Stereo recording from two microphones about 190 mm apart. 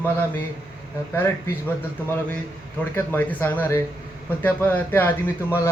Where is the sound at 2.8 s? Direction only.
10° left (ahead or behind).